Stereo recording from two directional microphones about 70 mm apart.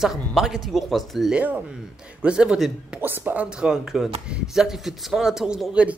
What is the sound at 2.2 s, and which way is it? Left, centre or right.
Speech, centre.